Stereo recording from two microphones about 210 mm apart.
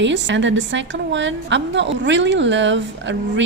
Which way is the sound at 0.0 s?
60° right (ahead or behind).